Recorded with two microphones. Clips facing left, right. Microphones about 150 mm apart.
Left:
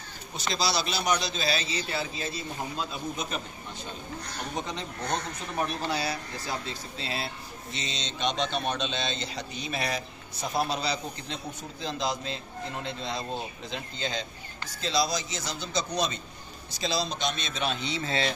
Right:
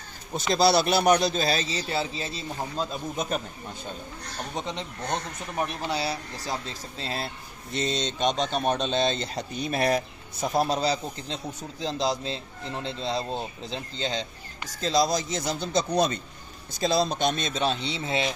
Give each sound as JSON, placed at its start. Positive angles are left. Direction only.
{"t": 0.6, "sound": "a man's voice", "side_deg": -55}
{"t": 2.9, "sound": "a man's voice", "side_deg": -45}
{"t": 4.6, "sound": "speech", "side_deg": -25}
{"t": 7.0, "sound": "a man's voice", "side_deg": -40}
{"t": 14.8, "sound": "a man's voice", "side_deg": -45}